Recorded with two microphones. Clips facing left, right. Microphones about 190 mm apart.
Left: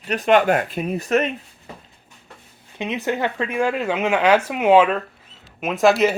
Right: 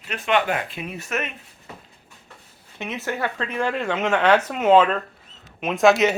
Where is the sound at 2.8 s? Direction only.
15° left (ahead or behind).